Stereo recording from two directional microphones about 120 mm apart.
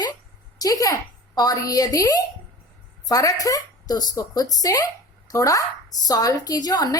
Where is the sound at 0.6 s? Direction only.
30° left (ahead or behind).